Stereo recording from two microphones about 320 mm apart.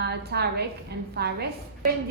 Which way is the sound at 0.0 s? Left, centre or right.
Right.